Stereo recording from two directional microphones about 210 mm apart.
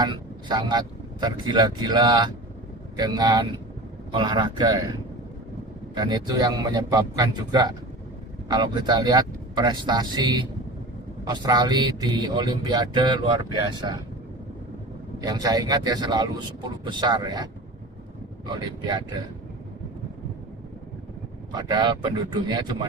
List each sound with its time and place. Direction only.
0.0 s speech: 20° right (ahead or behind)
15.2 s speech: 20° right (ahead or behind)
21.5 s speech: 20° right (ahead or behind)